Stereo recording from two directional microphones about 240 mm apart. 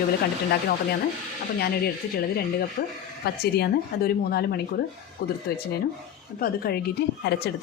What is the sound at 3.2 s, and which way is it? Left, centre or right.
A woman's voice, left.